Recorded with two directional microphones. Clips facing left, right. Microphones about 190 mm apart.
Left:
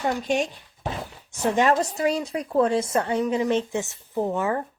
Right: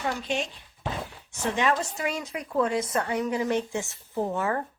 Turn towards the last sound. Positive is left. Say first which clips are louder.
# left 3 dB
turn(degrees=20)  # may be behind; listen again after turning